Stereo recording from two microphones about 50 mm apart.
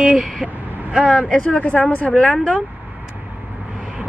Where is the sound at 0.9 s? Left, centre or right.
Left.